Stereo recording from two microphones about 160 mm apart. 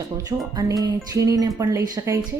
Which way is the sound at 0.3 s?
25° right (ahead or behind).